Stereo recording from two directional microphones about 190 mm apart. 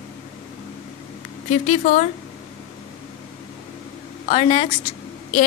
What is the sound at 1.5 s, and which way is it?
Speech, 35° left (ahead or behind).